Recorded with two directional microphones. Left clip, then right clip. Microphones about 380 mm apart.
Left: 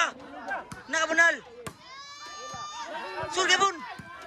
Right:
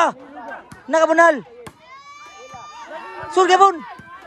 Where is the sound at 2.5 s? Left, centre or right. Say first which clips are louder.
Right 2 dB; centre.